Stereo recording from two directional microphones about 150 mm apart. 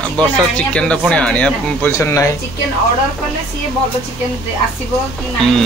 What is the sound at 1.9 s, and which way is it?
Speech, 20° left (ahead or behind).